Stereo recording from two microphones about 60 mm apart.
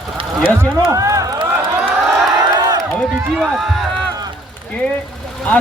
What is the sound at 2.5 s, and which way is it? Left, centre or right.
Crowd, right.